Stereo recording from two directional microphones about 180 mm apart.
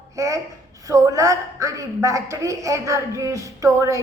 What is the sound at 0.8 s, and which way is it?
A woman's voice, 20° right (ahead or behind).